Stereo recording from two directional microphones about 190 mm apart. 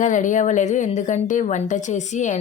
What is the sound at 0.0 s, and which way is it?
A woman's voice, 40° left (ahead or behind).